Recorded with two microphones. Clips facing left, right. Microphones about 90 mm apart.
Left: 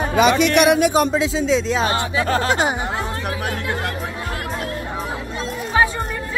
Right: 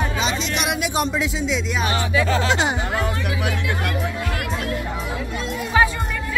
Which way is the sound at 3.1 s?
35° left (ahead or behind).